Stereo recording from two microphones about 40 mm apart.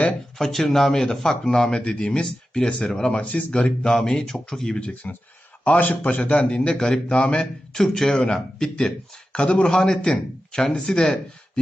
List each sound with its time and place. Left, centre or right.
0.3 s speech: centre; by 3.2 s left
3.2 s a man's voice: left
3.5 s speech: left
5.6 s a man's voice: left
6.6 s speech: left
7.8 s speech: centre
8.2 s speech: left